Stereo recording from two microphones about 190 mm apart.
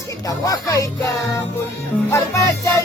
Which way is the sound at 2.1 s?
15° left (ahead or behind).